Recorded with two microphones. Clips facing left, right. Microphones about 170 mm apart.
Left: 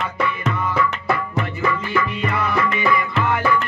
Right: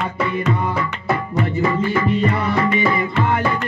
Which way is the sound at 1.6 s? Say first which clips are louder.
Right 2 dB; 35° right (ahead or behind).